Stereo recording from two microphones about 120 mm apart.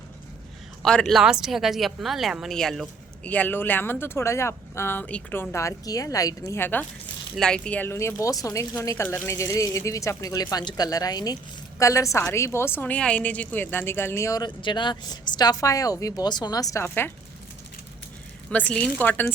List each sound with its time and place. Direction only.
0.8 s speech: 5° left (ahead or behind)
3.2 s a woman's voice: 15° left (ahead or behind)
7.3 s a woman's voice: 5° left (ahead or behind)
18.5 s speech: 10° left (ahead or behind)